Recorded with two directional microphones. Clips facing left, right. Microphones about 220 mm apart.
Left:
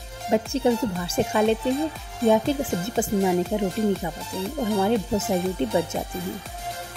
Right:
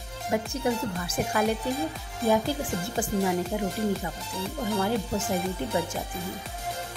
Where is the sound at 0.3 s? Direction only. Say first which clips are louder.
Left 6 dB; 25° left (ahead or behind).